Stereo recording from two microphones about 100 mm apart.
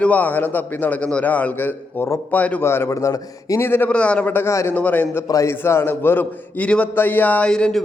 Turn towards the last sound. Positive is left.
turn(degrees=10)  # may be behind; listen again after turning